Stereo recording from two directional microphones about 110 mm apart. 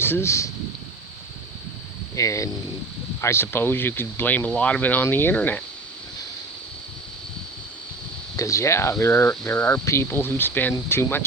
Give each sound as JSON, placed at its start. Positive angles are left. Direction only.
{"t": 0.0, "sound": "speech", "side_deg": 20}
{"t": 2.1, "sound": "speech", "side_deg": 30}
{"t": 8.4, "sound": "speech", "side_deg": 25}